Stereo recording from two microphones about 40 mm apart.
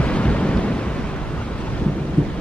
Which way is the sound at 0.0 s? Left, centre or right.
Left.